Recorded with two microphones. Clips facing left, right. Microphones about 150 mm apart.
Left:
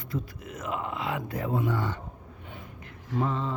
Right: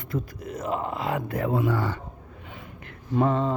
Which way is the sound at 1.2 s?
60° right (ahead or behind).